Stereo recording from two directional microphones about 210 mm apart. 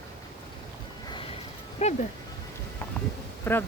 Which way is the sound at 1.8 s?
30° left (ahead or behind).